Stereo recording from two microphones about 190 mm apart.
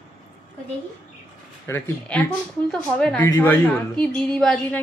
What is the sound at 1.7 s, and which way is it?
A woman's voice, 10° left (ahead or behind).